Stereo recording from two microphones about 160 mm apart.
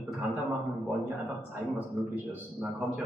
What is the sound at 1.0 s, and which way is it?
Speech, 10° right (ahead or behind).